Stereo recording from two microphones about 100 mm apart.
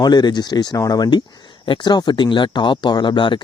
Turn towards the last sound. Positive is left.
turn(degrees=50)  # may be behind; listen again after turning